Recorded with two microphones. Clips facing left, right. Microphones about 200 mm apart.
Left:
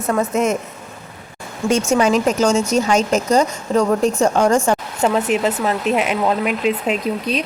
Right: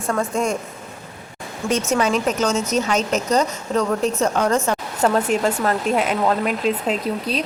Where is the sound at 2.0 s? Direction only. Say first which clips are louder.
Left 4 dB; 45° left (ahead or behind).